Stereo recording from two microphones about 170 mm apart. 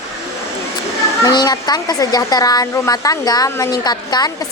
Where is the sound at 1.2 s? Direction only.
25° left (ahead or behind).